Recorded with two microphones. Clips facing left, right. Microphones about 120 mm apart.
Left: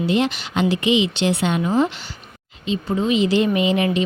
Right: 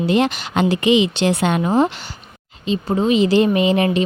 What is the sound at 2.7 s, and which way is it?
Speech, 40° right (ahead or behind).